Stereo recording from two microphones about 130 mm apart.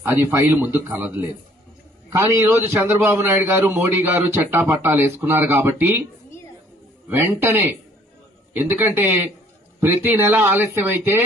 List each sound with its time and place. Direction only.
0.3 s a man's voice: 20° right (ahead or behind)
7.1 s a man's voice: 15° right (ahead or behind)